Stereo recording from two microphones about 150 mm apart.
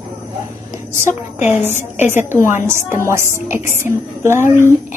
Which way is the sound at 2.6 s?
15° right (ahead or behind).